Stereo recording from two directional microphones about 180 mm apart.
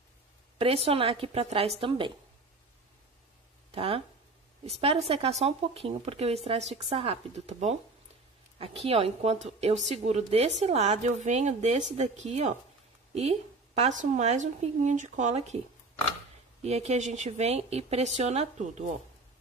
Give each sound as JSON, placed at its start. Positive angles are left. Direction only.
{"t": 0.6, "sound": "a woman's voice", "side_deg": -35}
{"t": 3.7, "sound": "speech", "side_deg": -30}
{"t": 16.6, "sound": "speech", "side_deg": -35}